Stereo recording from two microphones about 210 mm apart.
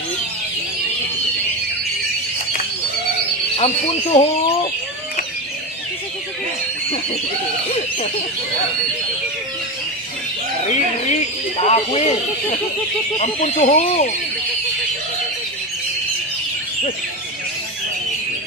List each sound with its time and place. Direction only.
3.5 s speech: 30° left (ahead or behind)
11.1 s speech: 30° left (ahead or behind)